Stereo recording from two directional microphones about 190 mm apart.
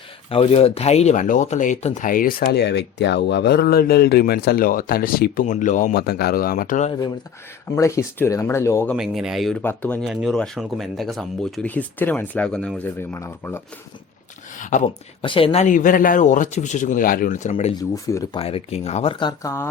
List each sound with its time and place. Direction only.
0.3 s speech: 30° left (ahead or behind)
7.8 s speech: 15° left (ahead or behind)
9.0 s speech: centre (ahead or behind); by 13.6 s 15° left (ahead or behind)
14.6 s speech: 40° left (ahead or behind)
15.2 s speech: 30° left (ahead or behind)
17.7 s speech: 20° left (ahead or behind)
18.3 s speech: 30° left (ahead or behind)
19.2 s speech: 20° left (ahead or behind)